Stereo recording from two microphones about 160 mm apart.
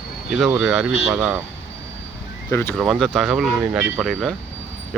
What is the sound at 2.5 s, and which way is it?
Speech, 15° left (ahead or behind).